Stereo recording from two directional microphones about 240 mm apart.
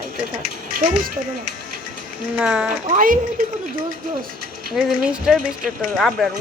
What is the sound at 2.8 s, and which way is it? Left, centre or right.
Speech, right.